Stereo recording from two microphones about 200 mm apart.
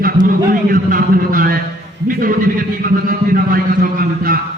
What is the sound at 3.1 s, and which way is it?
A man's voice, 45° right (ahead or behind).